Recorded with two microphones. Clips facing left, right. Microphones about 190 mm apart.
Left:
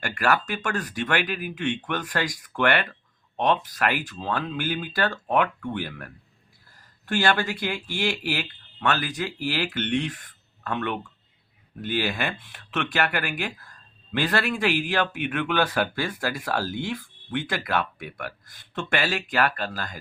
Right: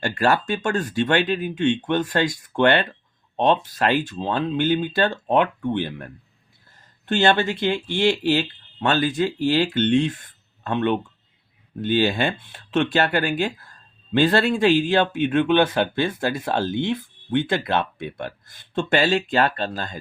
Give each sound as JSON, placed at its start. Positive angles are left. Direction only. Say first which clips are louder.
{"t": 0.0, "sound": "speech", "louder": "right 4 dB", "side_deg": -30}